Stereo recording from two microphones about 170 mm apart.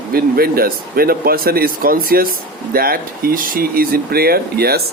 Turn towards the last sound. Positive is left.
turn(degrees=-65)  # may be behind; listen again after turning